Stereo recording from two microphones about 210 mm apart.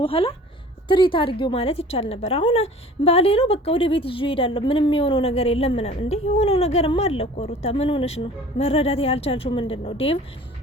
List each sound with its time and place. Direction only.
0.0 s a woman's voice: 25° left (ahead or behind)